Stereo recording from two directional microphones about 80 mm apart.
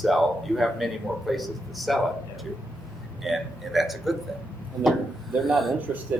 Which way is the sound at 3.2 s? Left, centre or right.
Centre.